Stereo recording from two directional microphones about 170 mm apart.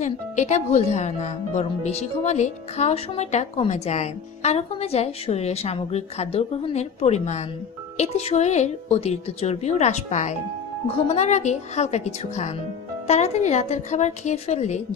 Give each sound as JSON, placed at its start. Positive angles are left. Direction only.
{"t": 0.0, "sound": "speech", "side_deg": 45}